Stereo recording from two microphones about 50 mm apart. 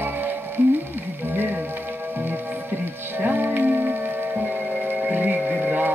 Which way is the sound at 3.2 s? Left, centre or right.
Right.